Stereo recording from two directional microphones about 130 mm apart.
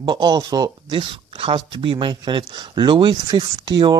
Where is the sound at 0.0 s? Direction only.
35° right (ahead or behind).